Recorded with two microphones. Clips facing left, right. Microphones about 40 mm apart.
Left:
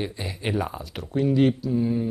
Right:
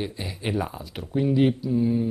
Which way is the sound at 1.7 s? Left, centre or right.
Centre.